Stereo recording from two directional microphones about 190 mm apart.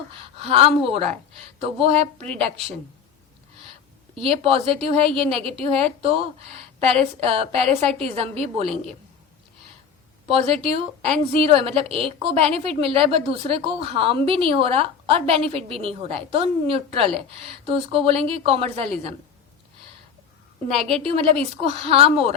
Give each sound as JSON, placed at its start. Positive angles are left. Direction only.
{"t": 0.3, "sound": "a woman's voice", "side_deg": -30}
{"t": 4.1, "sound": "a woman's voice", "side_deg": -30}
{"t": 10.2, "sound": "a woman's voice", "side_deg": -30}
{"t": 21.0, "sound": "speech", "side_deg": -30}